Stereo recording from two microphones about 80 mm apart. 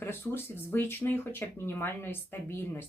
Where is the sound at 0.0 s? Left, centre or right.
Left.